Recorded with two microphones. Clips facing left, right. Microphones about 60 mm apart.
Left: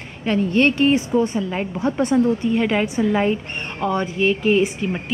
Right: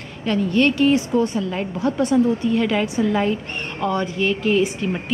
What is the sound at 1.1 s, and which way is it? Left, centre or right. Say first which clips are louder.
Speech: even; centre.